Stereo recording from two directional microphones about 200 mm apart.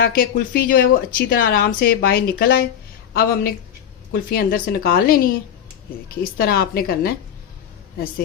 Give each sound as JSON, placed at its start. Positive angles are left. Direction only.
{"t": 0.2, "sound": "a woman's voice", "side_deg": 45}